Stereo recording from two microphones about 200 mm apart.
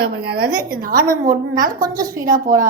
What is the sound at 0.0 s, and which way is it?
A woman's voice, 50° right (ahead or behind).